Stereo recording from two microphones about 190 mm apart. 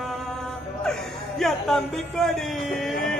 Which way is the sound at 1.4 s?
Centre (ahead or behind).